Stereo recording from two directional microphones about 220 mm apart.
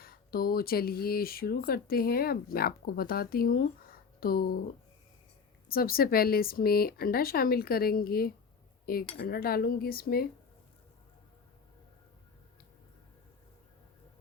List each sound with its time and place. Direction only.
0.0 s speech: 45° left (ahead or behind)
5.6 s speech: 40° left (ahead or behind)